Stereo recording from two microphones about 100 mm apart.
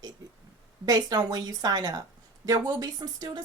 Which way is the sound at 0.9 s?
40° right (ahead or behind).